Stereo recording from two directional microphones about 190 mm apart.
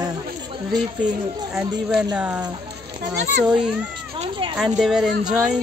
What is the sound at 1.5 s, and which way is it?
A woman's voice, 5° right (ahead or behind).